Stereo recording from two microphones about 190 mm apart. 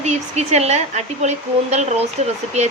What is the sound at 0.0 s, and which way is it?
Speech, 35° right (ahead or behind).